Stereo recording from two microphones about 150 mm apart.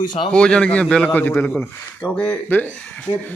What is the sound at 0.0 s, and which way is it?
Speech, 30° left (ahead or behind).